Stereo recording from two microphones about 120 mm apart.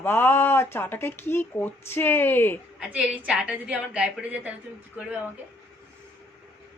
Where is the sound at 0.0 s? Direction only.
20° left (ahead or behind).